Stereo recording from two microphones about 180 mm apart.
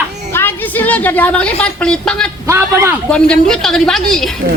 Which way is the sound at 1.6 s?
5° left (ahead or behind).